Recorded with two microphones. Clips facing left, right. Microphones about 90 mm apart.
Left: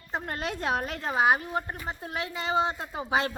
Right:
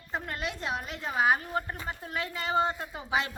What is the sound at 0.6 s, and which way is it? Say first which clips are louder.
Speech: left 5 dB; 50° left (ahead or behind).